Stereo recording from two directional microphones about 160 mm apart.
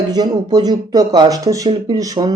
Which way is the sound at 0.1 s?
25° right (ahead or behind).